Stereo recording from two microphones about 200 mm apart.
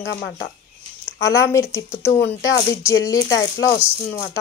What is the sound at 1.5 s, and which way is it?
Speech, 15° left (ahead or behind).